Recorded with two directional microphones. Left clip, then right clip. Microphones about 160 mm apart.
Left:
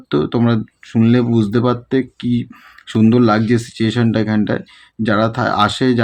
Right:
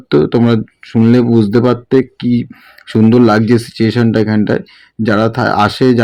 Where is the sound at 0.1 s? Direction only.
20° right (ahead or behind).